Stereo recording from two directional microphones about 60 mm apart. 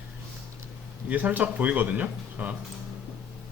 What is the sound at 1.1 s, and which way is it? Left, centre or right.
Speech, right.